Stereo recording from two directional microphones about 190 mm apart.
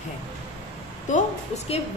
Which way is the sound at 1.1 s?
35° left (ahead or behind).